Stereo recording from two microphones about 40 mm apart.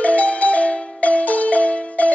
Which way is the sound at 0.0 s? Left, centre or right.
Left.